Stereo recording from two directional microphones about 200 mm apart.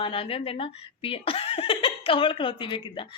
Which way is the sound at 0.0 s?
25° left (ahead or behind).